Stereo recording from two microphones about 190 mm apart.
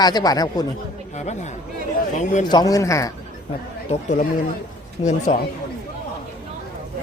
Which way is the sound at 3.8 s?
40° left (ahead or behind).